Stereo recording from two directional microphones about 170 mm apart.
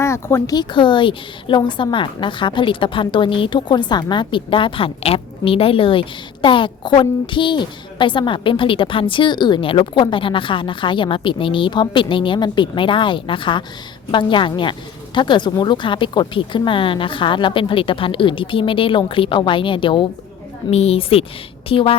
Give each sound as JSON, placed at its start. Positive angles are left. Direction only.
{"t": 0.0, "sound": "a woman's voice", "side_deg": 15}